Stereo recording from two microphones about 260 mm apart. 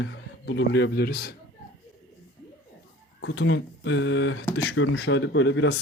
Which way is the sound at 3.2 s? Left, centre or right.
Left.